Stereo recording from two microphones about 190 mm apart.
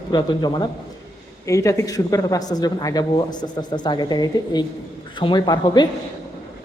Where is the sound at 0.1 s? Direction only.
20° left (ahead or behind).